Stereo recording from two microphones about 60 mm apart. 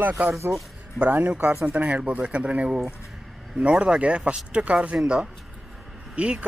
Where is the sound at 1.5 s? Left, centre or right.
Centre.